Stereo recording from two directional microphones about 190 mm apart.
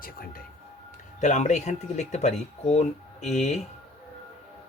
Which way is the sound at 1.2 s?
40° left (ahead or behind).